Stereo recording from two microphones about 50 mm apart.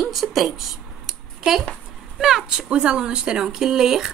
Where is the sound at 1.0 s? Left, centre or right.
Centre.